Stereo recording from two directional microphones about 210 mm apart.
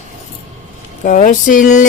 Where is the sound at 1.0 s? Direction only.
40° left (ahead or behind).